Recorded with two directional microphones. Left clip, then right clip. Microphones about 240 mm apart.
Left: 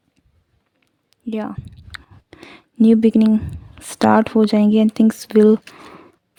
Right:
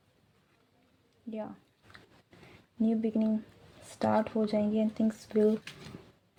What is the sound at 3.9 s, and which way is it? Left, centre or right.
Speech, left.